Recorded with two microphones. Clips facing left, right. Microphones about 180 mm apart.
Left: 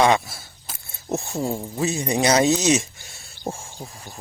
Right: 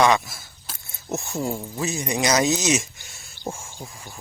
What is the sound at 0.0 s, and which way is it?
Speech, 30° left (ahead or behind).